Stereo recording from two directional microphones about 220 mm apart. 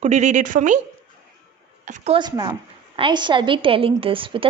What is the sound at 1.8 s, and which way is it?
Speech, 30° right (ahead or behind).